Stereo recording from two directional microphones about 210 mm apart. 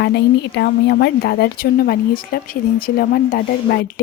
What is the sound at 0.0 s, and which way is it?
A woman's voice, 55° left (ahead or behind).